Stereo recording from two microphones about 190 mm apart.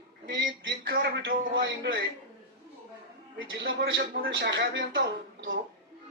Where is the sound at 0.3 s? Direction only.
80° right.